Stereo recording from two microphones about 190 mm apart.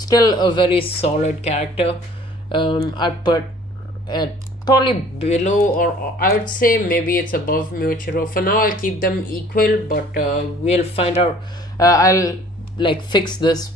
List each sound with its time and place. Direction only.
0.0 s speech: 20° left (ahead or behind)
5.3 s speech: 40° left (ahead or behind)
11.7 s speech: 15° left (ahead or behind)